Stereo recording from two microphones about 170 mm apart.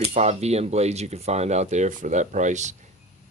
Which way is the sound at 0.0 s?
40° right (ahead or behind).